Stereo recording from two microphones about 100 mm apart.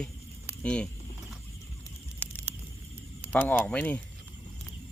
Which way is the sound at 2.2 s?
20° left (ahead or behind).